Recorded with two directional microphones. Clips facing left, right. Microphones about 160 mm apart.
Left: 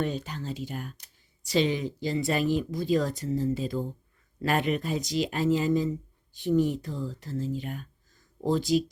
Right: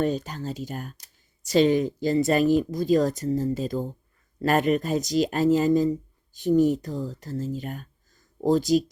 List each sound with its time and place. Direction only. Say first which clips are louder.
0.0 s speech: right 5 dB; 40° right (ahead or behind)